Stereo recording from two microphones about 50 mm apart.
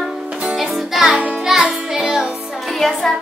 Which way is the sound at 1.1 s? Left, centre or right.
Right.